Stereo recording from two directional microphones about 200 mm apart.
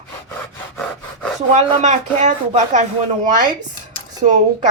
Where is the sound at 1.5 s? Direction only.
35° right (ahead or behind).